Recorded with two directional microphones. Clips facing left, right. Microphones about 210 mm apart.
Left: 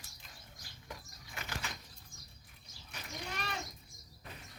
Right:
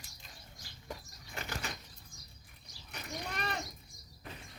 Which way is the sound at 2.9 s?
60° right (ahead or behind).